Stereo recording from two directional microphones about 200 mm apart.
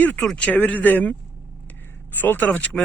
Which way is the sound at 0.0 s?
5° left (ahead or behind).